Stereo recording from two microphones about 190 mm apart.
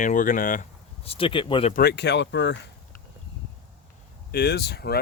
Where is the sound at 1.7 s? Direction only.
55° left (ahead or behind); by 2.6 s 70° left (ahead or behind).